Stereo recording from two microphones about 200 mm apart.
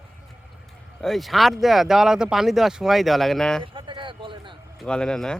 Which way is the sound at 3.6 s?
25° right (ahead or behind).